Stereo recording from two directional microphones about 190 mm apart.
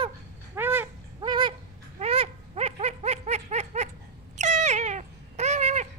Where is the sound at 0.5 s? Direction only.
10° right (ahead or behind).